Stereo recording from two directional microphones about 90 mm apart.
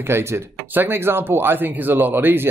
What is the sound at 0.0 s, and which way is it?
Speech, 30° right (ahead or behind).